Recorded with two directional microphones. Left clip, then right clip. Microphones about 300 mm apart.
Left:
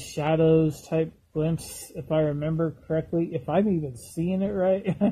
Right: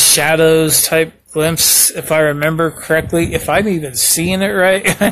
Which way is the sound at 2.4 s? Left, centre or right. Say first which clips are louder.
Right 14 dB; right.